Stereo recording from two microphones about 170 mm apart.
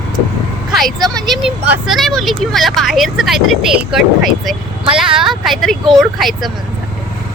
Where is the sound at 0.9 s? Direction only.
20° right (ahead or behind).